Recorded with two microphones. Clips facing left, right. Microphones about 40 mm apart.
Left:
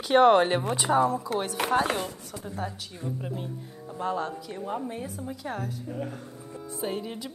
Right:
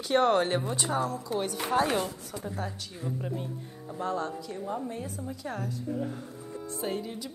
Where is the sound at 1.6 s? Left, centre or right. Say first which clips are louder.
Left 7 dB; left.